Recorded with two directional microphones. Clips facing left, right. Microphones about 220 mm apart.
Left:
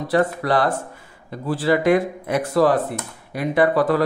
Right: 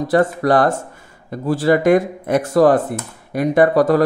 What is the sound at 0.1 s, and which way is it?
Speech, 45° right (ahead or behind).